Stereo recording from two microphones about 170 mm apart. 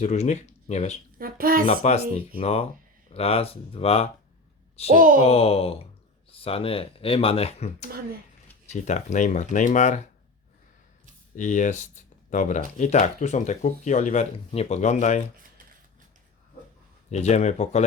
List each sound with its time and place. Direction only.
0.0 s speech: 40° left (ahead or behind)
1.2 s a sound: 60° right (ahead or behind)
1.6 s speech: 40° left (ahead or behind)
4.9 s speech: 55° right (ahead or behind)
5.2 s speech: 35° left (ahead or behind)
11.3 s speech: 45° left (ahead or behind)
17.1 s speech: 40° left (ahead or behind)